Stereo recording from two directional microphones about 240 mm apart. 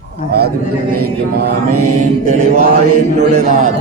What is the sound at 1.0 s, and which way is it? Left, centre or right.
Speech, right.